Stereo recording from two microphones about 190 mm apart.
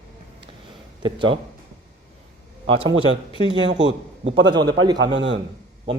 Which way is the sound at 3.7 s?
70° right (ahead or behind).